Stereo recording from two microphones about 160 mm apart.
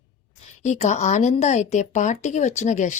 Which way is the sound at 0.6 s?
45° left (ahead or behind).